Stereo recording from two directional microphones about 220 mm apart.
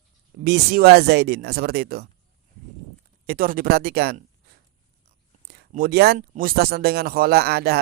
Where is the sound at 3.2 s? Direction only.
45° right (ahead or behind).